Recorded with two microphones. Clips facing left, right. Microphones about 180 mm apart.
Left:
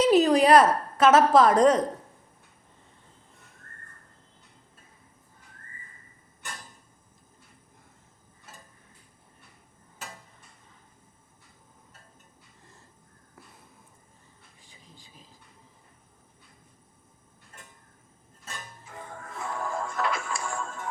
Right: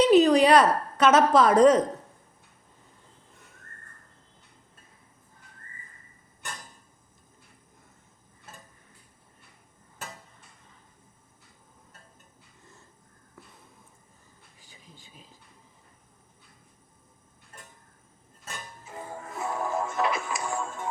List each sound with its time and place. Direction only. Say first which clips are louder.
0.0 s a woman's voice: right 2 dB; centre (ahead or behind)
15.1 s a sound: right 1 dB; centre (ahead or behind)
18.9 s music: right 4 dB; 25° right (ahead or behind)